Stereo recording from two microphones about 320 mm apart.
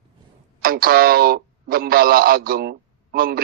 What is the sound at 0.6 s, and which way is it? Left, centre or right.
Speech, right.